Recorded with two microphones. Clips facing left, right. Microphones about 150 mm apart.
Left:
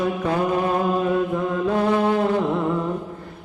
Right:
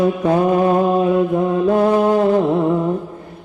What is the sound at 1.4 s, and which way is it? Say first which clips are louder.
Mantra: right 6 dB; 40° right (ahead or behind).